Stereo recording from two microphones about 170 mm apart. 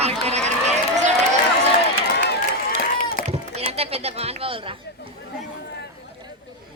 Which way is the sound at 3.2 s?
35° right (ahead or behind).